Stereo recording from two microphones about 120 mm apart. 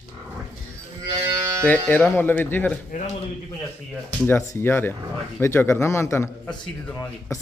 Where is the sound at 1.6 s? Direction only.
15° left (ahead or behind).